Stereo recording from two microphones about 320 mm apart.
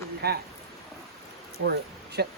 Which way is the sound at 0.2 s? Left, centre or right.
Right.